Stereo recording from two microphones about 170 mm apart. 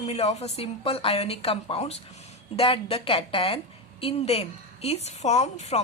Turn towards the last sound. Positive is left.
turn(degrees=40)  # may be behind; listen again after turning